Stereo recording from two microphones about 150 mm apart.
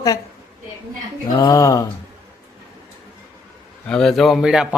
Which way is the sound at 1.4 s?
25° left (ahead or behind).